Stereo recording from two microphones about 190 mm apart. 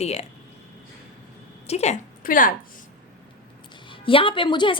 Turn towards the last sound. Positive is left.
turn(degrees=25)  # may be behind; listen again after turning